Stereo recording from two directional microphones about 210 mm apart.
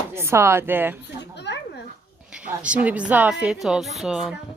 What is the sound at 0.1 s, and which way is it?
Speech, 10° right (ahead or behind).